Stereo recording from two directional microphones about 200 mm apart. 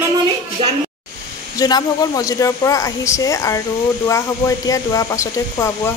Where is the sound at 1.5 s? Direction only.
20° left (ahead or behind).